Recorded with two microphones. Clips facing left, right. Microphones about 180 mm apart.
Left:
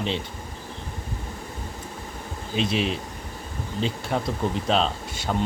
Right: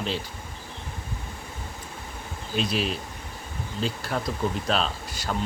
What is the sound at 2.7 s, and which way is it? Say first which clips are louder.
Speech: left 3 dB; centre (ahead or behind).